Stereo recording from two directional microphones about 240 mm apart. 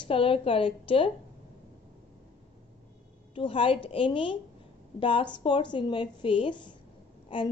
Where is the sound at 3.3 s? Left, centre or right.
Left.